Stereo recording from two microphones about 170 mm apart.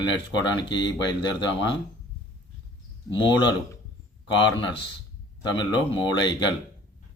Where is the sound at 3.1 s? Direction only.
30° left (ahead or behind).